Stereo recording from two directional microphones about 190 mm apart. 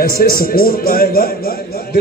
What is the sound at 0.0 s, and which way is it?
A man's voice, 50° left (ahead or behind).